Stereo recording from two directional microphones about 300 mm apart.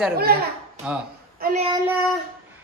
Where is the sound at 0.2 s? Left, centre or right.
Right.